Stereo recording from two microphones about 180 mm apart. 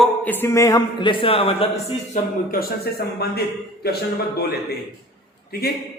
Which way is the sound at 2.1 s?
55° left (ahead or behind).